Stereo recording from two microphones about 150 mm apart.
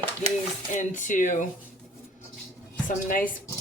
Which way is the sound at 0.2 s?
45° right (ahead or behind).